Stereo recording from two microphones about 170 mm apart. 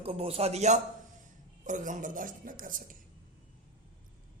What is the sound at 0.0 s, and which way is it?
A man's voice, 35° right (ahead or behind).